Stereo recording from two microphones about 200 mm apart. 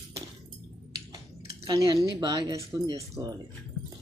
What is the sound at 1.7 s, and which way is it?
Speech, 20° right (ahead or behind).